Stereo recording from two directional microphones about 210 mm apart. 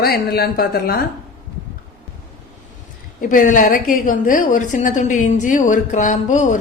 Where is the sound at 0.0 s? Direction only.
50° left (ahead or behind).